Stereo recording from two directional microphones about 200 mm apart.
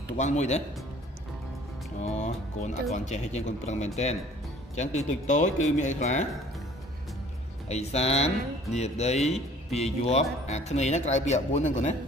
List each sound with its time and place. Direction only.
0.2 s speech: 35° left (ahead or behind)
2.0 s speech: 35° left (ahead or behind)
7.6 s speech: 30° left (ahead or behind)